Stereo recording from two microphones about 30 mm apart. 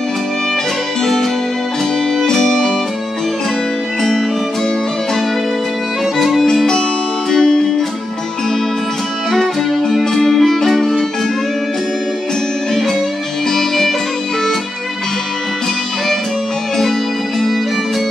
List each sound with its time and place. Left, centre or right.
2.3 s music: centre
6.1 s music: centre
7.2 s music: left
9.4 s music: centre
13.5 s music: centre